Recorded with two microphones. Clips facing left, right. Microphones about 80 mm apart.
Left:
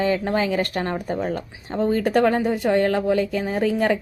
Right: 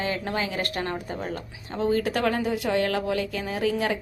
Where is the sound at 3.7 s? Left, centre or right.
Left.